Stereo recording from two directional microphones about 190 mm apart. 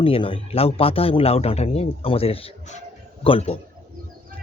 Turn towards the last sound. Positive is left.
turn(degrees=30)  # may be behind; listen again after turning